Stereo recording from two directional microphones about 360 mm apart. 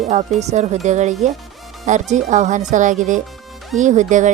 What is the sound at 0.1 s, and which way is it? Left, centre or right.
Speech, centre.